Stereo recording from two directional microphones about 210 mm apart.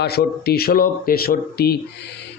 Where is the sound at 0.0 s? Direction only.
50° left (ahead or behind).